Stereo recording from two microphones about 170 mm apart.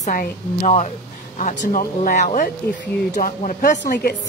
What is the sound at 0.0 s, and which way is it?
Speech, 50° left (ahead or behind).